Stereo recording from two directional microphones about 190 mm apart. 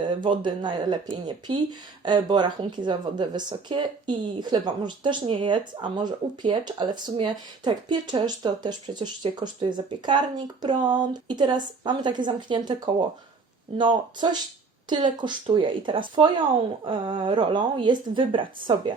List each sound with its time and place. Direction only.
0.1 s speech: 25° right (ahead or behind)